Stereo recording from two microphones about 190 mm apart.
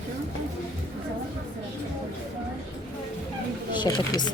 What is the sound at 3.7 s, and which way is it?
Speech, 25° left (ahead or behind).